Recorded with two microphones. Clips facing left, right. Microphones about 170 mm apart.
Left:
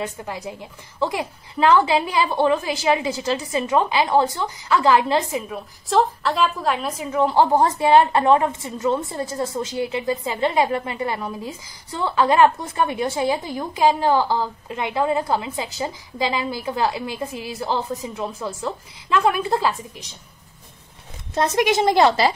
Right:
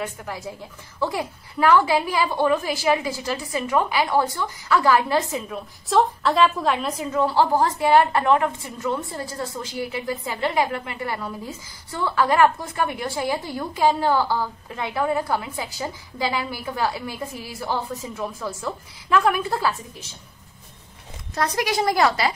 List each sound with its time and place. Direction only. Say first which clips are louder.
0.0 s a woman's voice: left 2 dB; 20° left (ahead or behind)
5.5 s a woman's voice: right 1 dB; centre (ahead or behind); by 20.1 s 20° left (ahead or behind)
21.4 s a woman's voice: left 4 dB; 25° left (ahead or behind)